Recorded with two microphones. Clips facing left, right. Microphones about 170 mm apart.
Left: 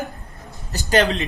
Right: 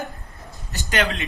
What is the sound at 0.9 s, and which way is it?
Speech, 35° left (ahead or behind).